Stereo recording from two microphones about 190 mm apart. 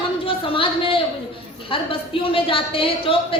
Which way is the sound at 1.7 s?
30° left (ahead or behind).